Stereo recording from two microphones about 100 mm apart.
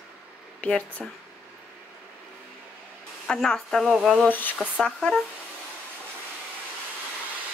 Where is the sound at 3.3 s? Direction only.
5° left (ahead or behind).